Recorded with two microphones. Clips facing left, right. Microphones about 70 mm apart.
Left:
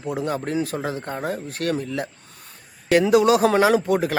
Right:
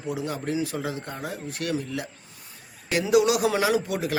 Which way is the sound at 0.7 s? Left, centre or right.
Left.